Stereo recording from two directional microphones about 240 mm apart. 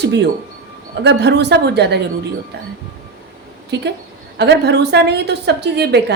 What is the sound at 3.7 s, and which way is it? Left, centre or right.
A woman's voice, right.